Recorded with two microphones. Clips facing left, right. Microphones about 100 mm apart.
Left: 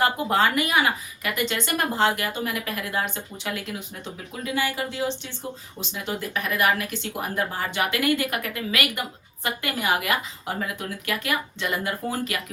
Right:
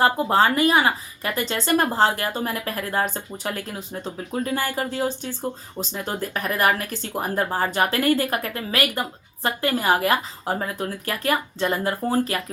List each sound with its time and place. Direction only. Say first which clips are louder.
0.0 s speech: right 3 dB; 30° right (ahead or behind)